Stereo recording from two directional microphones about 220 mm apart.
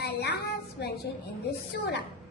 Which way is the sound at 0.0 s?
50° left (ahead or behind).